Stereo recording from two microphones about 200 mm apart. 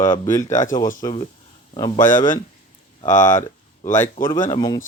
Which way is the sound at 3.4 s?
15° left (ahead or behind).